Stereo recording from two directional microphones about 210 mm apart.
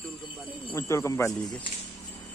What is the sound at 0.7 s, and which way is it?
Speech, 15° left (ahead or behind).